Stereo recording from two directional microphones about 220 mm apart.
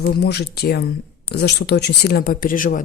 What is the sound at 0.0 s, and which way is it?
Speech, 45° left (ahead or behind).